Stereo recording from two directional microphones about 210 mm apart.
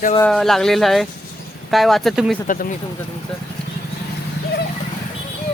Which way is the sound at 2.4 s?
40° left (ahead or behind).